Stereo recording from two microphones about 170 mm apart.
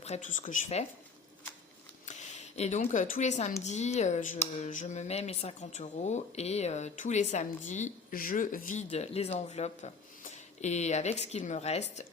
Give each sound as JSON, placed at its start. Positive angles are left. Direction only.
{"t": 0.0, "sound": "speech", "side_deg": 45}
{"t": 2.0, "sound": "speech", "side_deg": 45}
{"t": 8.9, "sound": "speech", "side_deg": 40}